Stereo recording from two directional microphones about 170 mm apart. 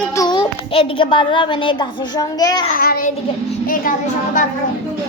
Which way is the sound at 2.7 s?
60° left (ahead or behind).